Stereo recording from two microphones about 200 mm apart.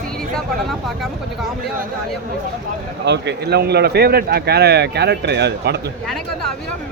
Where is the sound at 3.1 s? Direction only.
55° right (ahead or behind).